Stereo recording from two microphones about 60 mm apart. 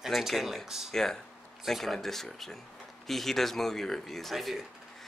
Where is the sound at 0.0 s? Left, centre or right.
Centre.